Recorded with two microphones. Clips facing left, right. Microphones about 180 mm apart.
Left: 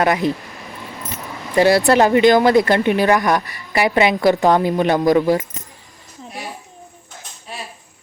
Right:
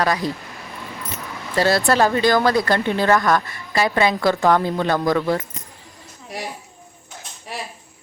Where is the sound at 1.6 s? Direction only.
15° left (ahead or behind).